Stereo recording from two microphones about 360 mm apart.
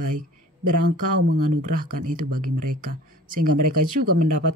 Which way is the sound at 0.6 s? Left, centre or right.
Right.